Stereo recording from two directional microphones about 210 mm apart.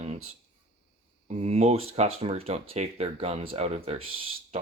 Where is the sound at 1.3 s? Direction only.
30° right (ahead or behind).